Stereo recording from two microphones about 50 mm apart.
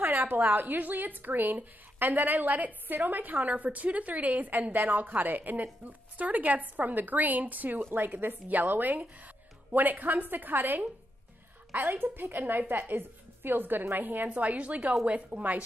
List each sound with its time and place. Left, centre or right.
0.0 s speech: right
12.0 s a woman's voice: right